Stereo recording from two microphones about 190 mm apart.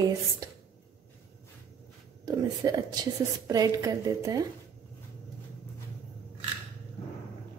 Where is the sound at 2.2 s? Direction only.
20° right (ahead or behind).